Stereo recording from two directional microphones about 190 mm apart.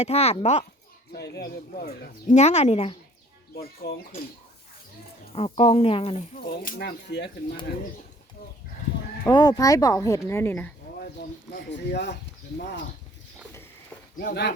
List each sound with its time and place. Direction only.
0.0 s speech: 35° left (ahead or behind)
1.1 s speech: 60° left (ahead or behind)
2.3 s speech: 35° left (ahead or behind)
3.5 s speech: 55° left (ahead or behind)
5.3 s speech: 30° left (ahead or behind)
6.3 s speech: 50° left (ahead or behind)
9.2 s speech: 20° left (ahead or behind)
11.5 s speech: 65° left (ahead or behind)
14.2 s speech: 60° left (ahead or behind)